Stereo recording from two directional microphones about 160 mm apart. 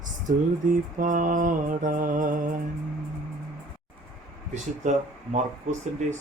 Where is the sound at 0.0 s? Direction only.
55° right (ahead or behind).